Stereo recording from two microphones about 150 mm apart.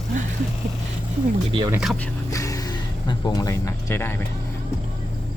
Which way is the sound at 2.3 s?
20° left (ahead or behind).